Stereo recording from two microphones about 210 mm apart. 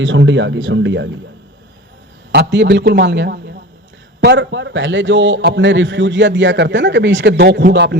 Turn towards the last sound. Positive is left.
turn(degrees=-55)  # may be behind; listen again after turning